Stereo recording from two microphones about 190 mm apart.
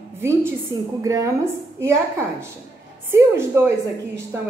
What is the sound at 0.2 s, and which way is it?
A woman's voice, 15° right (ahead or behind).